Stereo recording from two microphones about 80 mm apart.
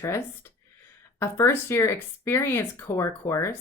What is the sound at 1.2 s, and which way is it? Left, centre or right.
Speech, left.